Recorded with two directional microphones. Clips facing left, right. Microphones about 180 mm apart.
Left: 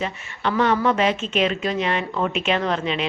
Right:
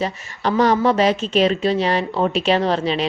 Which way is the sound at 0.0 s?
40° right (ahead or behind).